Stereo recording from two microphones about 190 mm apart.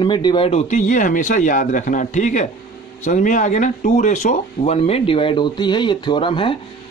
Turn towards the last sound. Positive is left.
turn(degrees=25)  # may be behind; listen again after turning